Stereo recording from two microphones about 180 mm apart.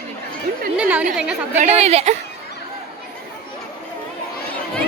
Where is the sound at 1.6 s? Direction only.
35° right (ahead or behind).